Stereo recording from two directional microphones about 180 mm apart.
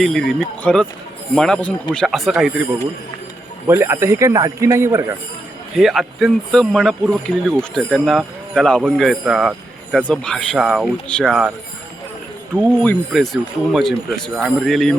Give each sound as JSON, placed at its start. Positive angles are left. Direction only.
{"t": 0.0, "sound": "speech", "side_deg": 0}
{"t": 3.7, "sound": "a man's voice", "side_deg": -15}
{"t": 5.7, "sound": "speech", "side_deg": 0}
{"t": 12.7, "sound": "speech", "side_deg": 5}